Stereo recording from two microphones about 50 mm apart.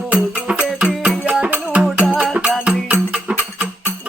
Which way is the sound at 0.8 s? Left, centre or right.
Right.